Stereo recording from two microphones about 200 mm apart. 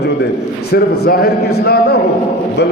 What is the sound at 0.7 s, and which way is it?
A man's voice, 50° left (ahead or behind).